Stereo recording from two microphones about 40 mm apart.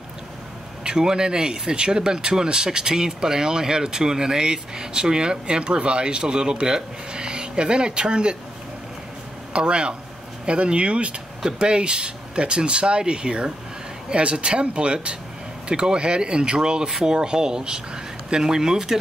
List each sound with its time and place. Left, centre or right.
0.8 s speech: centre
9.5 s speech: right